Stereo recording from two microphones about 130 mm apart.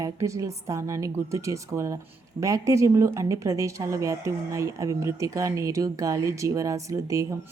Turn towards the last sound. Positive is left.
turn(degrees=-25)  # may be behind; listen again after turning